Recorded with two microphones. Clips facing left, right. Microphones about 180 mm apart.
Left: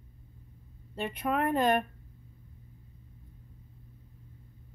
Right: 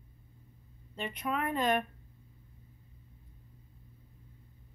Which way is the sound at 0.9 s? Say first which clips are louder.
Left 4 dB; 50° left (ahead or behind).